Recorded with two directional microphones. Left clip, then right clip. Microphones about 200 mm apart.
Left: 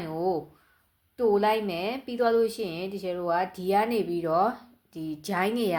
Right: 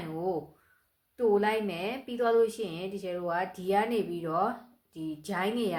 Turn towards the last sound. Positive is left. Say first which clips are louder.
# left 4 dB
turn(degrees=40)  # may be behind; listen again after turning